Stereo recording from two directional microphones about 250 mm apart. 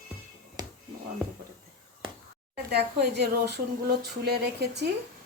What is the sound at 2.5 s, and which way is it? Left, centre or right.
Speech, right.